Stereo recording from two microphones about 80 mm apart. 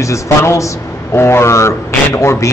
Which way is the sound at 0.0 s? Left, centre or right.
Left.